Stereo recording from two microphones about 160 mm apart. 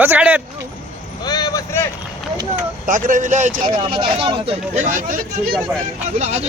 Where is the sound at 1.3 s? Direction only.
25° left (ahead or behind).